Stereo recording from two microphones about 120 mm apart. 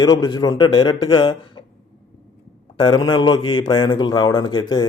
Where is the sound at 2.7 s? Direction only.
35° left (ahead or behind).